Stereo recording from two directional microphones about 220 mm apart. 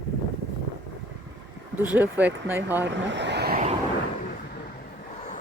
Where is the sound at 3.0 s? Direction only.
55° right (ahead or behind).